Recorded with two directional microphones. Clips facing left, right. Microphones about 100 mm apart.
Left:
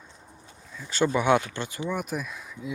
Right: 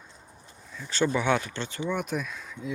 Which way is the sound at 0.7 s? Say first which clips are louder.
Left 1 dB; 5° left (ahead or behind).